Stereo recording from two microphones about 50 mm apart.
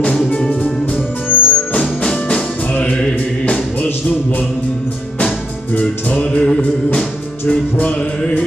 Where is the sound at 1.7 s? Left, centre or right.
Centre.